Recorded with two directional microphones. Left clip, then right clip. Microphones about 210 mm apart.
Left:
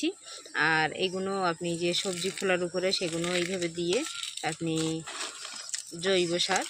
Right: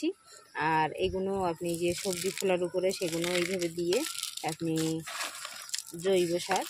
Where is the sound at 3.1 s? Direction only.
30° right (ahead or behind).